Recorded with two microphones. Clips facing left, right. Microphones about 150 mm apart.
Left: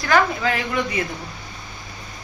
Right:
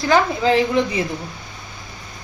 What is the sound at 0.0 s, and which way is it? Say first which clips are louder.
A woman's voice: right 2 dB; 30° right (ahead or behind).